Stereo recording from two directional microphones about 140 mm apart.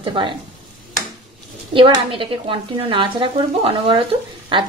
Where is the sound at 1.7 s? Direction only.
40° right (ahead or behind).